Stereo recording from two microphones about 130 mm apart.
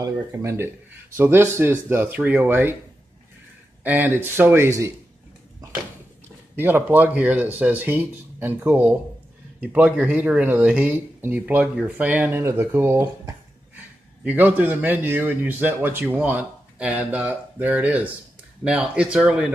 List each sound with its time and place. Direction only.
0.0 s speech: 20° right (ahead or behind)
3.8 s speech: 15° right (ahead or behind)
6.5 s speech: 15° right (ahead or behind)